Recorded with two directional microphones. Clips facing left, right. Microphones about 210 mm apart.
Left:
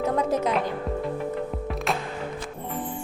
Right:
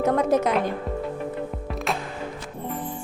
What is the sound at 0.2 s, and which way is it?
Music, 80° right.